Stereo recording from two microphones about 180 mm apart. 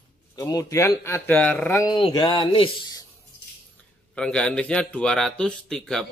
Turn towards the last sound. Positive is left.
turn(degrees=5)  # may be behind; listen again after turning